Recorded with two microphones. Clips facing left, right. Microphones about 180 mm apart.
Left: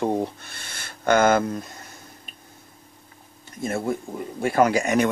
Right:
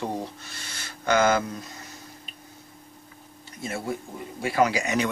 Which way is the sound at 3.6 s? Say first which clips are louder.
Left 5 dB; 50° left (ahead or behind).